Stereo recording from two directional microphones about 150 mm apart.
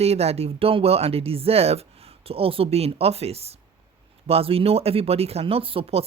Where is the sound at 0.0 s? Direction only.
45° right (ahead or behind).